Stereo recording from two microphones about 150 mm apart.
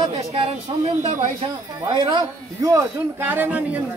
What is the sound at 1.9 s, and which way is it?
Speech, 30° right (ahead or behind).